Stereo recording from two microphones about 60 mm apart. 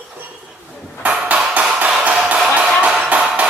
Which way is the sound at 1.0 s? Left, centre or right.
Right.